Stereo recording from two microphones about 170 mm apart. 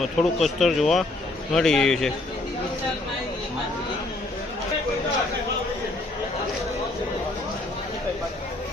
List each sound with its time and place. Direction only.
0.0 s speech: centre (ahead or behind)